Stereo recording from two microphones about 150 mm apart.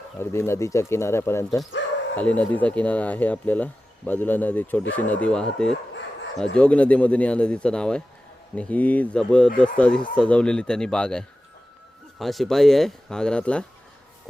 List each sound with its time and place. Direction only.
0.2 s speech: 15° left (ahead or behind)